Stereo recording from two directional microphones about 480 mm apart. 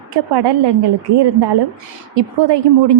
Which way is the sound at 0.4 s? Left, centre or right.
Right.